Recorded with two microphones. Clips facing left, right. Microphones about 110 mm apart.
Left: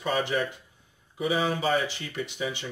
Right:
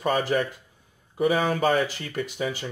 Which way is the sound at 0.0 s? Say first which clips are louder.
Right 3 dB; 45° right (ahead or behind).